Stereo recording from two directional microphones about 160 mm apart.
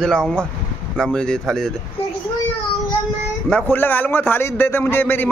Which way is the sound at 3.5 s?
10° left (ahead or behind).